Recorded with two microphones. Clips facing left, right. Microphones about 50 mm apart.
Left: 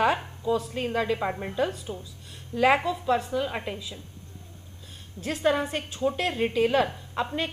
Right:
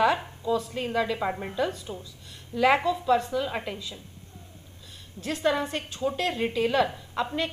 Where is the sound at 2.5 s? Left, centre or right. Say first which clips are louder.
Even; centre.